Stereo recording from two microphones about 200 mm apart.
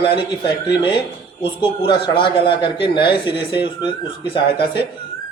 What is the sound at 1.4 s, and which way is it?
A man's voice, 25° left (ahead or behind).